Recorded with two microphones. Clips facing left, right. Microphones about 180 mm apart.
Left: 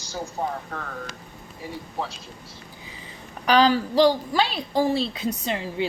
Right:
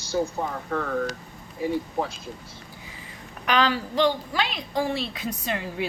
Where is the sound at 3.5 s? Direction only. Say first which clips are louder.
Left 5 dB; 35° left (ahead or behind).